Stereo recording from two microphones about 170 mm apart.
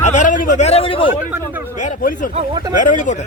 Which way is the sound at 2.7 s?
50° left (ahead or behind).